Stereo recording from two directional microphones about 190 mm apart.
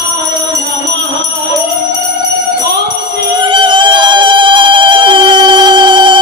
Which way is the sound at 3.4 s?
25° right (ahead or behind).